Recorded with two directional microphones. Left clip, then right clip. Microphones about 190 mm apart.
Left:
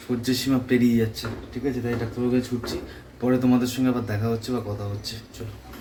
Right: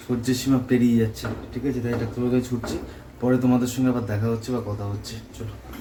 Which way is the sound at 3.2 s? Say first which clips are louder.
Even; 10° left (ahead or behind).